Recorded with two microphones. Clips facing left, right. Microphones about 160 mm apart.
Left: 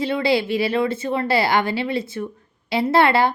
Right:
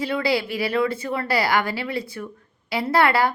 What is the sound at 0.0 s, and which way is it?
A woman's voice, 25° left (ahead or behind).